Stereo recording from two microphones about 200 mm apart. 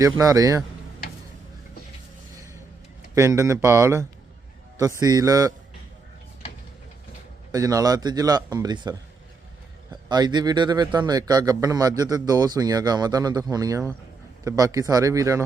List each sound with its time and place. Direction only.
0.2 s speech: 15° right (ahead or behind)
3.2 s speech: 15° right (ahead or behind)
7.5 s a man's voice: 20° right (ahead or behind)